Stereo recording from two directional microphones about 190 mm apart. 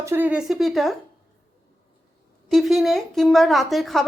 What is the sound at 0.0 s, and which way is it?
Speech, 10° right (ahead or behind).